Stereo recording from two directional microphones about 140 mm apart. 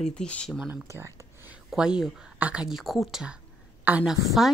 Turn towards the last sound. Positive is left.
turn(degrees=-5)  # may be behind; listen again after turning